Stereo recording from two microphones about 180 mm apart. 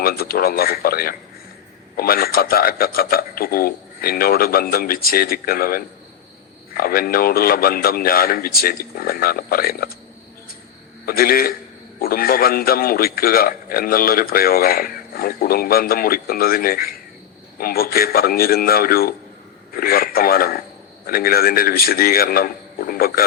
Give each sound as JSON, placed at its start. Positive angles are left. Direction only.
{"t": 0.0, "sound": "a man's voice", "side_deg": 55}
{"t": 11.0, "sound": "a man's voice", "side_deg": 55}